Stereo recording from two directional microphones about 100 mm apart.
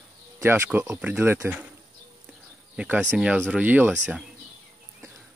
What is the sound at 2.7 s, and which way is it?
Speech, 10° right (ahead or behind).